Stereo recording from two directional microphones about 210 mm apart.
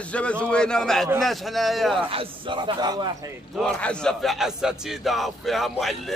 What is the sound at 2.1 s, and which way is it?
A man's voice, 25° right (ahead or behind).